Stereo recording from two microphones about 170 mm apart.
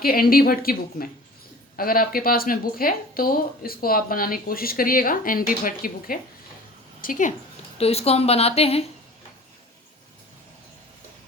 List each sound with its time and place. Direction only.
0.0 s speech: 60° left (ahead or behind)
7.8 s speech: 35° left (ahead or behind)